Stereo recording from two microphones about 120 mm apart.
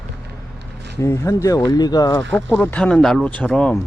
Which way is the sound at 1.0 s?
25° left (ahead or behind).